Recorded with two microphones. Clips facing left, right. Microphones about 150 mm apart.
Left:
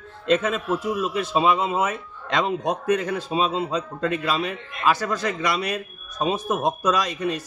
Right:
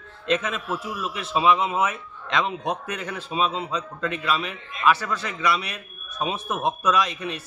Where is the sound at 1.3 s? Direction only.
35° left (ahead or behind).